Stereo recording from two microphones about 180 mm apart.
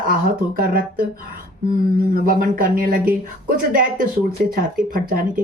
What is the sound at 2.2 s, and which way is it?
Speech, 50° right (ahead or behind).